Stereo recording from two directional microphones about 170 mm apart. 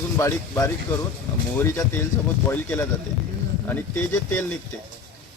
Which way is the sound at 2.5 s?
15° left (ahead or behind).